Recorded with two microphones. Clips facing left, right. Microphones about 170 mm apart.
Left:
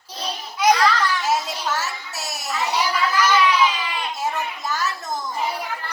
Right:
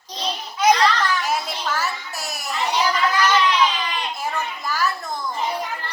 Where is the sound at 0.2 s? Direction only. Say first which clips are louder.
Right 1 dB; 10° left (ahead or behind).